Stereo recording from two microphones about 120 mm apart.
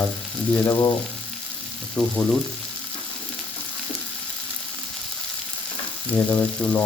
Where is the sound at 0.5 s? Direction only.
20° left (ahead or behind).